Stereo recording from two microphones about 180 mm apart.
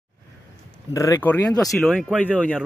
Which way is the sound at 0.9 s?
15° left (ahead or behind).